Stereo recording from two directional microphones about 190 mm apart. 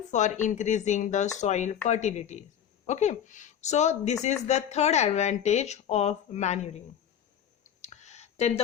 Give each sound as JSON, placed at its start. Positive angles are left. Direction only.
{"t": 0.1, "sound": "speech", "side_deg": 40}
{"t": 7.6, "sound": "clicking", "side_deg": 35}